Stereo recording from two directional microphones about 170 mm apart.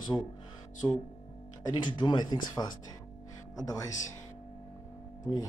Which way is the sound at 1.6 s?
25° left (ahead or behind).